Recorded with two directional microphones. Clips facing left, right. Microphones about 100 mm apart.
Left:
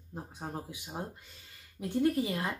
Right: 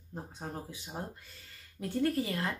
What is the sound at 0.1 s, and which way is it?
Speech, 10° left (ahead or behind).